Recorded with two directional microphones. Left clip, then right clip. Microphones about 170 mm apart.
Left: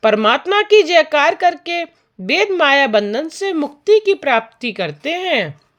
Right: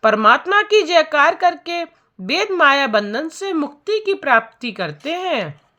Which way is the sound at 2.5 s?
35° left (ahead or behind).